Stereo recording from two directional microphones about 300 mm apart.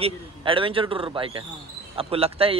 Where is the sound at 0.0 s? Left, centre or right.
Centre.